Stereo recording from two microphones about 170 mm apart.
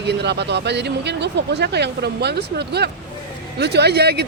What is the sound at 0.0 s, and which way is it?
Speech, 85° right.